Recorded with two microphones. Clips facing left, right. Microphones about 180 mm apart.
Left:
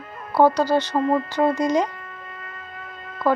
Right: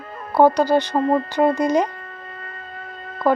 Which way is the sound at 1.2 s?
15° right (ahead or behind).